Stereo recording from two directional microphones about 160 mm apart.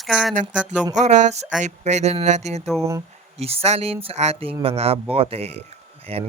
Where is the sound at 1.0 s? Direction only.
50° right (ahead or behind).